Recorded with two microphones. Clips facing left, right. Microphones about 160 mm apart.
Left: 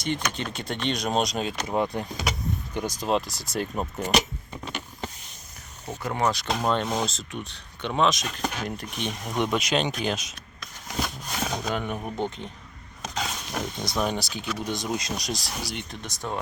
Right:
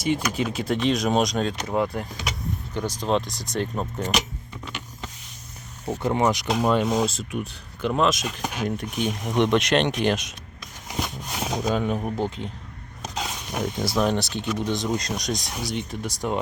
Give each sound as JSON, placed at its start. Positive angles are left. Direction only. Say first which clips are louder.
{"t": 0.0, "sound": "speech", "louder": "right 5 dB", "side_deg": -5}
{"t": 1.6, "sound": "speech", "louder": "right 1 dB", "side_deg": 15}
{"t": 4.6, "sound": "power windows", "louder": "left 2 dB", "side_deg": 45}
{"t": 5.9, "sound": "speech", "louder": "right 4 dB", "side_deg": -25}
{"t": 10.6, "sound": "a sound", "louder": "even", "side_deg": -15}
{"t": 11.9, "sound": "speech", "louder": "right 4 dB", "side_deg": -10}
{"t": 13.0, "sound": "dog", "louder": "even", "side_deg": 0}
{"t": 13.8, "sound": "speech", "louder": "right 5 dB", "side_deg": 0}
{"t": 14.5, "sound": "speech", "louder": "right 4 dB", "side_deg": -20}
{"t": 15.2, "sound": "speech", "louder": "right 3 dB", "side_deg": 5}